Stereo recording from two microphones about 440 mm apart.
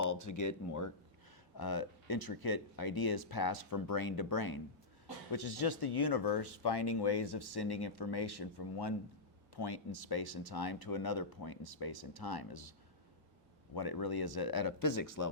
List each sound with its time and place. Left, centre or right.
0.0 s speech: left
1.5 s speech: left
13.7 s speech: left